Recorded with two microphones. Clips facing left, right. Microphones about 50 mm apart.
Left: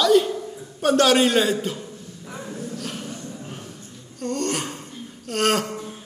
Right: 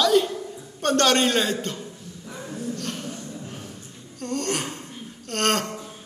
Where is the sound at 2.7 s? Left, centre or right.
Centre.